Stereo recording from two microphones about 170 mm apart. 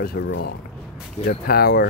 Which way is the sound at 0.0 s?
65° left (ahead or behind).